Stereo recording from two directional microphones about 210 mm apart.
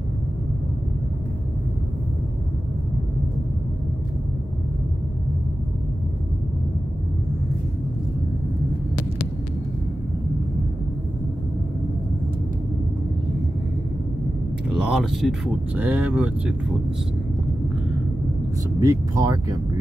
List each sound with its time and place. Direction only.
14.7 s speech: centre (ahead or behind)
18.8 s speech: 15° right (ahead or behind)